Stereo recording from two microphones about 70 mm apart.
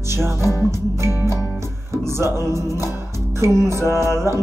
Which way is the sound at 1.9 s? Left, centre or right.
Right.